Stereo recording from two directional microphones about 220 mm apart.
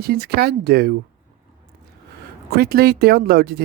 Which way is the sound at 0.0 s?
45° right (ahead or behind).